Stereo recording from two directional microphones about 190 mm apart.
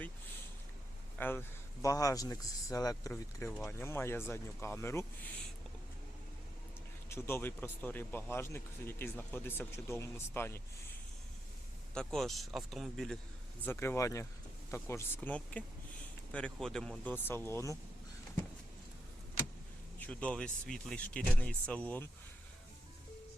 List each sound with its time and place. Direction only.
1.2 s speech: 10° left (ahead or behind)
7.1 s speech: 15° left (ahead or behind)
11.9 s speech: centre (ahead or behind)
13.7 s speech: 15° left (ahead or behind)
20.0 s speech: 5° left (ahead or behind)